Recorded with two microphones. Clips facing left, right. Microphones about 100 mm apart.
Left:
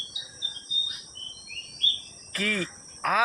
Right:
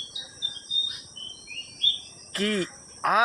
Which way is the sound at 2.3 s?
30° right (ahead or behind).